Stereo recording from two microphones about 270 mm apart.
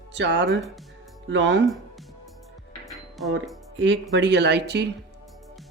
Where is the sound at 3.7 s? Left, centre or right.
Right.